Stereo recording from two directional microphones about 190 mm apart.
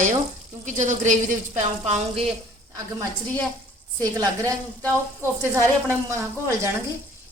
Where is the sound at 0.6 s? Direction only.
40° right (ahead or behind).